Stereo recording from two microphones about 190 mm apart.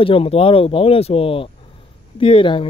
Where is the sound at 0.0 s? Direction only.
30° left (ahead or behind).